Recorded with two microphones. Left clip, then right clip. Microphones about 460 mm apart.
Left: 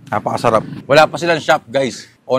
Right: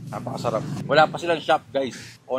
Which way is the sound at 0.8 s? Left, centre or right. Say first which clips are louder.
Left 7 dB; left.